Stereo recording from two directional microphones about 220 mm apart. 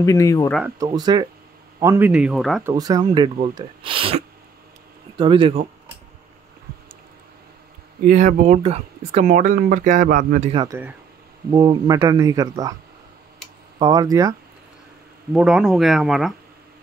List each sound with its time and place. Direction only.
0.0 s speech: 15° left (ahead or behind)
0.5 s speech: centre (ahead or behind)
0.7 s speech: 20° right (ahead or behind); by 2.6 s centre (ahead or behind)
2.6 s speech: 15° right (ahead or behind)
8.1 s speech: 35° right (ahead or behind)
10.6 s speech: 10° right (ahead or behind)
13.7 s speech: 15° right (ahead or behind)
15.3 s speech: 5° right (ahead or behind)